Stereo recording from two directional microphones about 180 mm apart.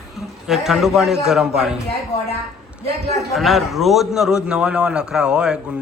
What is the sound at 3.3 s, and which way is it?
A man's voice, centre (ahead or behind).